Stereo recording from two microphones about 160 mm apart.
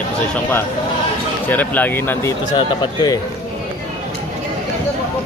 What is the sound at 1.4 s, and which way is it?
Speech, 10° left (ahead or behind).